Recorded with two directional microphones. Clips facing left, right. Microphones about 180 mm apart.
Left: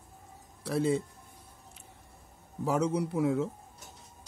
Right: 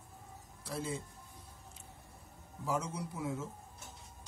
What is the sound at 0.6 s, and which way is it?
Speech, 65° left (ahead or behind).